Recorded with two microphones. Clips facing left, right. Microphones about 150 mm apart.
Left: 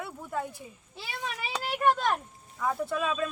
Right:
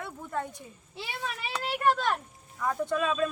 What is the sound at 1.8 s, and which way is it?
Speech, centre (ahead or behind).